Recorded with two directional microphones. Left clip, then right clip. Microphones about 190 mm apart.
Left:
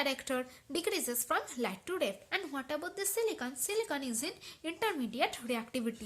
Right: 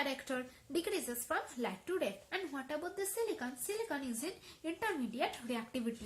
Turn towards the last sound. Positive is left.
turn(degrees=45)  # may be behind; listen again after turning